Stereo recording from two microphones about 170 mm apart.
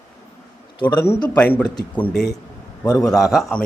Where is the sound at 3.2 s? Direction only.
Centre (ahead or behind).